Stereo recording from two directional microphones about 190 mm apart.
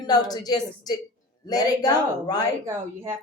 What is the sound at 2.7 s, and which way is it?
Speech, 15° right (ahead or behind).